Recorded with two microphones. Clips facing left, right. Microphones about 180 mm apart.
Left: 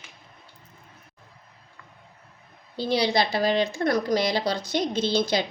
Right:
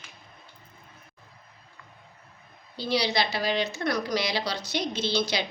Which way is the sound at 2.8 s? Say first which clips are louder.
Left 3 dB; 50° left (ahead or behind).